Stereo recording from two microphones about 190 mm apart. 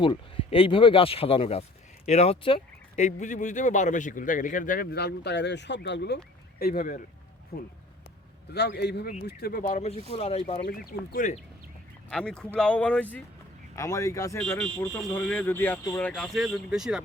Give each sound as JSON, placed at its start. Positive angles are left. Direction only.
{"t": 0.0, "sound": "speech", "side_deg": 25}
{"t": 6.6, "sound": "a man's voice", "side_deg": 50}
{"t": 10.6, "sound": "speech", "side_deg": 50}
{"t": 12.1, "sound": "speech", "side_deg": 5}